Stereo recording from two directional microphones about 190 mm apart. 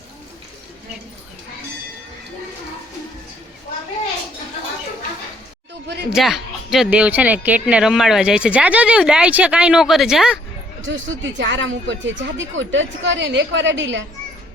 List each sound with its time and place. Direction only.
6.1 s speech: centre (ahead or behind)
10.8 s speech: 80° right